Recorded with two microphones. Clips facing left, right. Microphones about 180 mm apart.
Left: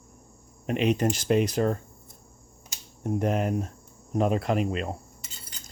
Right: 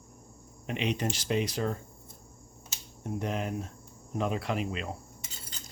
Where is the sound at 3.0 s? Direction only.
50° left (ahead or behind).